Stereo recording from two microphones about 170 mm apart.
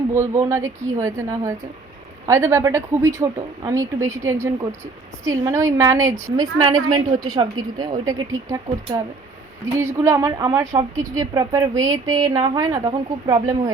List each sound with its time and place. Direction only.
0.1 s a woman's voice: 15° right (ahead or behind)